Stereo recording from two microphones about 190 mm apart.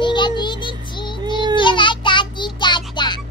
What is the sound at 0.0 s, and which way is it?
Child singing, 25° left (ahead or behind).